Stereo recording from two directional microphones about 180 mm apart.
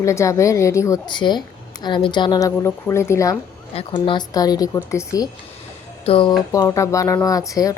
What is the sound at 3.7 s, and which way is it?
Speech, 30° left (ahead or behind).